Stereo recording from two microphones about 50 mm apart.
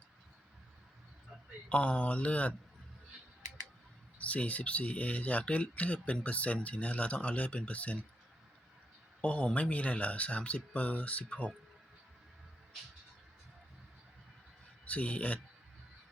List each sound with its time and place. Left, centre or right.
1.7 s speech: left
4.2 s speech: left
9.2 s speech: left
14.8 s speech: left